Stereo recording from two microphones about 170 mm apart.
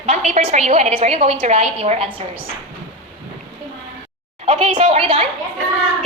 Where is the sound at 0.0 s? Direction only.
40° right (ahead or behind).